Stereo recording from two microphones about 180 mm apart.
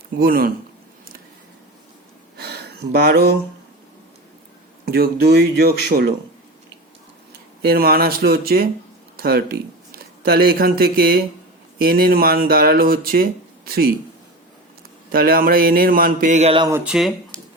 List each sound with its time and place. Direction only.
0.2 s speech: 55° right (ahead or behind)
2.4 s a sound: 60° right (ahead or behind)
4.9 s speech: 60° right (ahead or behind)
7.6 s speech: 60° right (ahead or behind)
15.1 s a man's voice: 55° right (ahead or behind); by 16.6 s 35° right (ahead or behind)
16.6 s speech: 15° right (ahead or behind)